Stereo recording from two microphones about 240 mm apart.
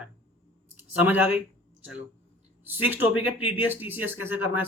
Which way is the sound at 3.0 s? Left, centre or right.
Left.